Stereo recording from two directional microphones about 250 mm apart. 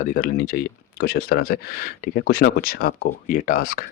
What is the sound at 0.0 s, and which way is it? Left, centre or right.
Speech, left.